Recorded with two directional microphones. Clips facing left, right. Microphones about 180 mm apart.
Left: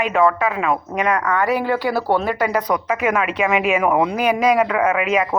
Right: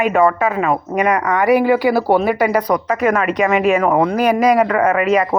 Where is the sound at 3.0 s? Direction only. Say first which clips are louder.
Right 5 dB; 5° left (ahead or behind).